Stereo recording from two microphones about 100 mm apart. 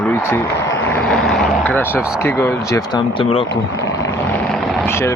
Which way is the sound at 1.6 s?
20° left (ahead or behind).